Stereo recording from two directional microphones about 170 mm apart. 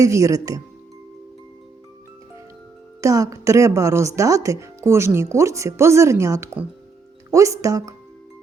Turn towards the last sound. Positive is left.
turn(degrees=-20)  # may be behind; listen again after turning